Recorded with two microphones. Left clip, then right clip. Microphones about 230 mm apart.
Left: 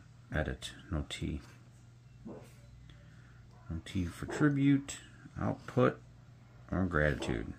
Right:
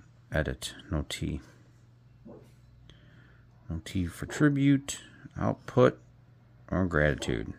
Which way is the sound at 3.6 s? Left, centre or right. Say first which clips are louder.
Right 4 dB; right.